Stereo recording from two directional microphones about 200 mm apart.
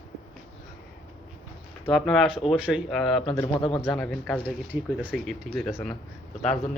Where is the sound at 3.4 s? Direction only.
25° left (ahead or behind).